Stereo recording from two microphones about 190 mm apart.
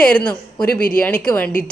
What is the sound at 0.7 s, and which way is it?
Speech, 50° left (ahead or behind).